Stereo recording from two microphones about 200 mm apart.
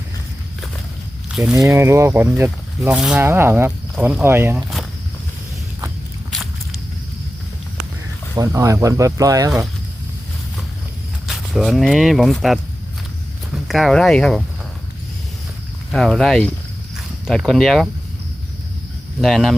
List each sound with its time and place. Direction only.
1.5 s speech: 15° right (ahead or behind)
8.4 s speech: 15° right (ahead or behind)
11.3 s speech: centre (ahead or behind)
15.9 s speech: centre (ahead or behind)
19.2 s speech: centre (ahead or behind)